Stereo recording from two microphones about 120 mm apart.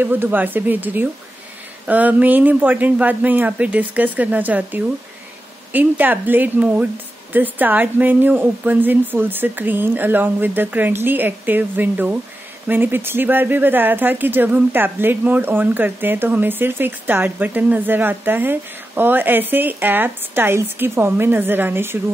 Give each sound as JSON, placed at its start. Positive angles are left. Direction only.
{"t": 0.0, "sound": "speech", "side_deg": -15}